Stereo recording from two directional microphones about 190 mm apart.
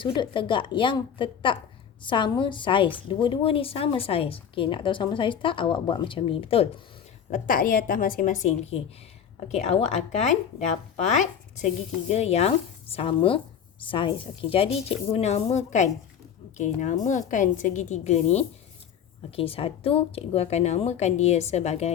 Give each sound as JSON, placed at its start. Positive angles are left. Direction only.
{"t": 0.0, "sound": "a woman's voice", "side_deg": 25}
{"t": 7.3, "sound": "a woman's voice", "side_deg": 45}